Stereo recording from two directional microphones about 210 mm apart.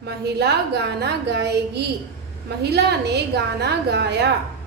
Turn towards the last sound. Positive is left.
turn(degrees=-55)  # may be behind; listen again after turning